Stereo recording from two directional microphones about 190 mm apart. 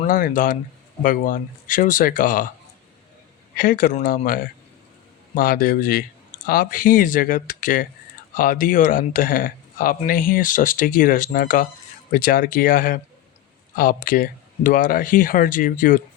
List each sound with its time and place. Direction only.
0.0 s speech: 45° left (ahead or behind)
3.6 s speech: 45° left (ahead or behind)